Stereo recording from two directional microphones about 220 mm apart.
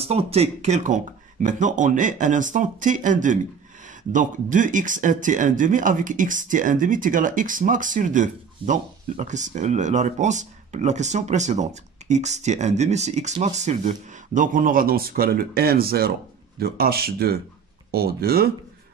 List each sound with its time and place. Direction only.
0.0 s speech: 25° right (ahead or behind); by 18.5 s 45° right (ahead or behind)